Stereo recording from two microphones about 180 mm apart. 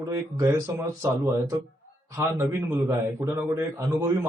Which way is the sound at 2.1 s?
15° right (ahead or behind).